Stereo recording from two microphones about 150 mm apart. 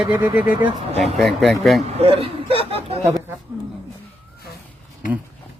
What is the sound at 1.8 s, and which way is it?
Speech, 40° right (ahead or behind).